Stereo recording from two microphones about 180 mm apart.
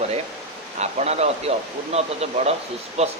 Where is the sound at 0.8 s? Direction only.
35° right (ahead or behind).